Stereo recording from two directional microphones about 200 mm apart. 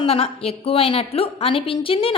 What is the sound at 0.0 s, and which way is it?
A woman's voice, 30° left (ahead or behind).